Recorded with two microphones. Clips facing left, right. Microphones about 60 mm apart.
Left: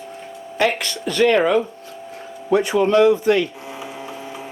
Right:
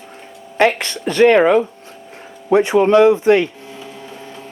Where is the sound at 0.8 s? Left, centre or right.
Right.